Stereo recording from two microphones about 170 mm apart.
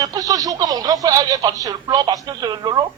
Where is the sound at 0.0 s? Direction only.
20° right (ahead or behind).